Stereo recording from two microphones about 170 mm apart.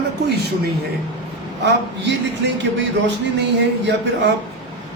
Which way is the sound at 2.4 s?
90° right.